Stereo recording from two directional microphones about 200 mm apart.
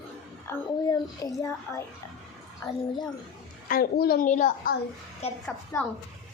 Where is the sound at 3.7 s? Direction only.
50° left (ahead or behind).